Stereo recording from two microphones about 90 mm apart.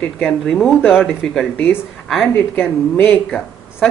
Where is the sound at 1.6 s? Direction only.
25° left (ahead or behind).